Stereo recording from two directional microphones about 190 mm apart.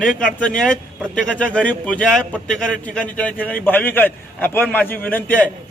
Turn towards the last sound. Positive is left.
turn(degrees=10)  # may be behind; listen again after turning